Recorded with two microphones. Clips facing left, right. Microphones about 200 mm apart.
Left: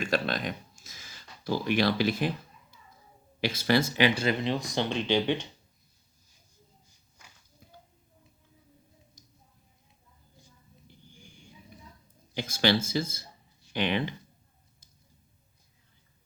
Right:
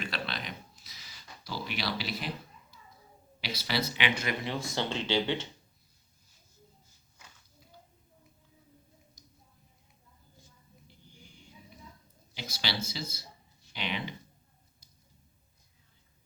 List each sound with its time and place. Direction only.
0.0 s a sound: 45° left (ahead or behind)
3.4 s speech: 50° left (ahead or behind); by 5.5 s 15° left (ahead or behind)
12.4 s speech: 50° left (ahead or behind)